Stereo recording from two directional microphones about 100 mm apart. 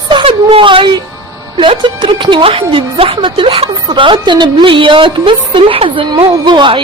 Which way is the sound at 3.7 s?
50° right (ahead or behind).